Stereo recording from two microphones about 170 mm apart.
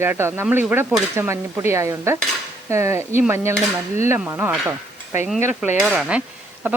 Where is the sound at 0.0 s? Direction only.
15° right (ahead or behind).